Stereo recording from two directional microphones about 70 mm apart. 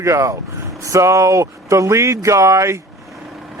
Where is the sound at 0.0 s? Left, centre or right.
Right.